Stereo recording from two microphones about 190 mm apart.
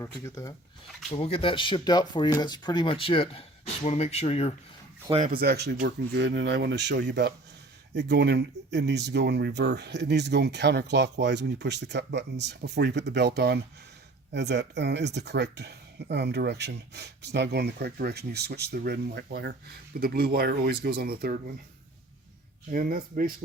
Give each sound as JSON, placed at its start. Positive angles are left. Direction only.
{"t": 0.0, "sound": "speech", "side_deg": 15}
{"t": 1.1, "sound": "speech", "side_deg": 30}
{"t": 5.2, "sound": "speech", "side_deg": -50}
{"t": 22.7, "sound": "speech", "side_deg": -45}